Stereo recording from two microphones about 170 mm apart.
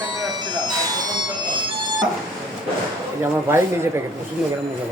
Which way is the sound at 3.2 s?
15° right (ahead or behind).